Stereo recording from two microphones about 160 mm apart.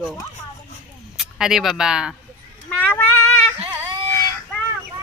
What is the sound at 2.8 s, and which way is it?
Child singing, 10° left (ahead or behind).